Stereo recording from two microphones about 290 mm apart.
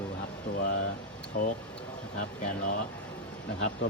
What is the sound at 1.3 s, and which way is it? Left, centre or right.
Speech, left.